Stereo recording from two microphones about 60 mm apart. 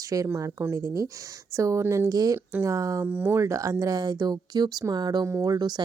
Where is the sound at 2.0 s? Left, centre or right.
Right.